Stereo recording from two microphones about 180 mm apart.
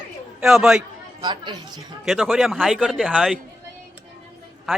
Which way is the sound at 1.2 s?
25° right (ahead or behind).